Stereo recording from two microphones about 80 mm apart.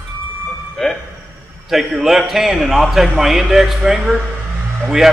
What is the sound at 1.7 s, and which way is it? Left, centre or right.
Speech, centre.